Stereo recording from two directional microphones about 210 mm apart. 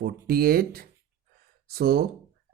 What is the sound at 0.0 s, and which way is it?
Speech, 45° right (ahead or behind).